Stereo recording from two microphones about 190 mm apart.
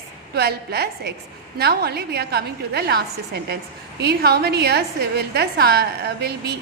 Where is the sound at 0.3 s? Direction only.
55° right (ahead or behind).